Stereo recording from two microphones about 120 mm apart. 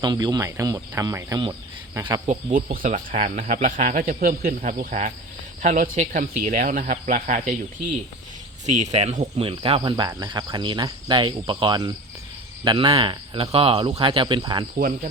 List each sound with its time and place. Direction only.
0.0 s speech: 35° right (ahead or behind)
2.2 s speech: 80° right
8.6 s speech: 75° right (ahead or behind); by 9.5 s 60° right (ahead or behind)
9.5 s speech: 45° right (ahead or behind)
10.1 s cricket: 35° right (ahead or behind)
12.6 s speech: 45° right (ahead or behind)